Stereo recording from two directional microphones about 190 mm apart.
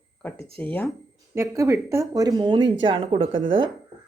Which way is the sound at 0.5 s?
5° left (ahead or behind).